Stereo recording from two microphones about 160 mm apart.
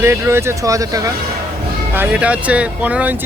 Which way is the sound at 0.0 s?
15° right (ahead or behind).